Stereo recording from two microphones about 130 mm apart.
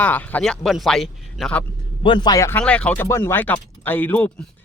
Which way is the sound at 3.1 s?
20° left (ahead or behind).